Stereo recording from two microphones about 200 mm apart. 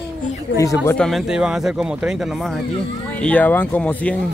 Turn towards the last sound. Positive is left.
turn(degrees=5)  # may be behind; listen again after turning